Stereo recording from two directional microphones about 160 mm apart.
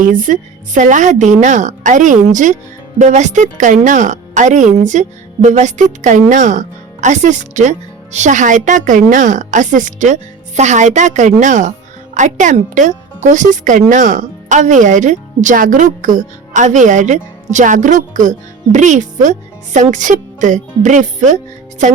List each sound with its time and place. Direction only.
0.0 s a woman's voice: 55° right (ahead or behind)